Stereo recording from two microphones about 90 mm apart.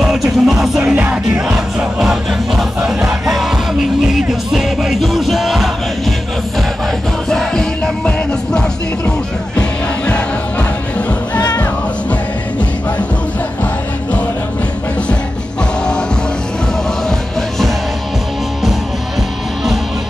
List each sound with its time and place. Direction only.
0.0 s music: 5° right (ahead or behind)
0.9 s music: 20° right (ahead or behind)
2.0 s music: 10° right (ahead or behind)
7.2 s music: 5° left (ahead or behind)
9.6 s music: 10° left (ahead or behind)